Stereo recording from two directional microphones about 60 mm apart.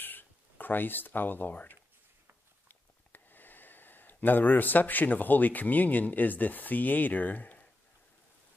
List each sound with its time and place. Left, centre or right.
0.0 s speech: left